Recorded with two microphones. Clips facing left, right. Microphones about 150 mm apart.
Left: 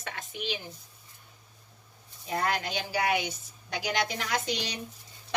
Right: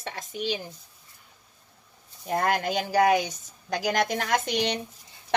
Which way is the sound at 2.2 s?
50° right (ahead or behind).